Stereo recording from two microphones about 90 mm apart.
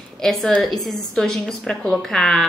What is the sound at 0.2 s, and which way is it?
A woman's voice, 5° left (ahead or behind).